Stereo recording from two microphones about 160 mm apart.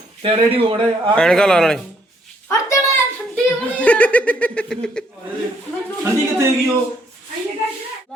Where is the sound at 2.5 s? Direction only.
20° left (ahead or behind).